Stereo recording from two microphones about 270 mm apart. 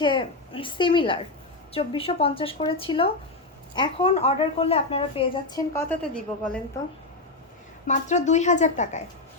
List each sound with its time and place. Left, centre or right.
0.0 s a woman's voice: centre
7.9 s a woman's voice: left